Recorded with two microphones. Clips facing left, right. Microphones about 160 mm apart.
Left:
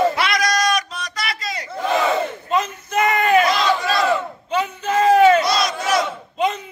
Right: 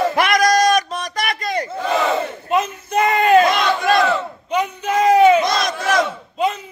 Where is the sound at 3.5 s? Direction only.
60° right (ahead or behind).